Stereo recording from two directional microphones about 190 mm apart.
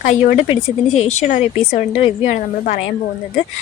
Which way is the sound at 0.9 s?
40° left (ahead or behind).